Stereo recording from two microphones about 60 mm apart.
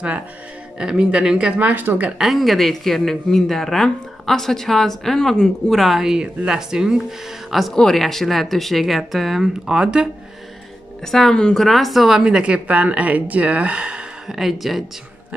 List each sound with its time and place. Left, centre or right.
0.7 s speech: centre
2.1 s speech: centre
5.8 s speech: centre
7.7 s speech: centre
9.8 s speech: centre
11.1 s speech: centre
12.2 s speech: centre
14.3 s speech: centre